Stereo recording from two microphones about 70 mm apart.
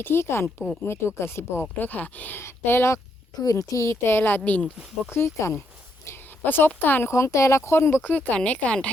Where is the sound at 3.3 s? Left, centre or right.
Left.